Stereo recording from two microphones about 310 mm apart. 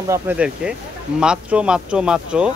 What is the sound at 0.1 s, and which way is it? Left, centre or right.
Speech, centre.